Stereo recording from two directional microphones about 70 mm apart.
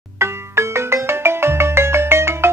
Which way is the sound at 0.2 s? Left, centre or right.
Right.